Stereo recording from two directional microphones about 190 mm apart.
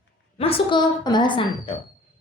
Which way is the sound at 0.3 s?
30° left (ahead or behind).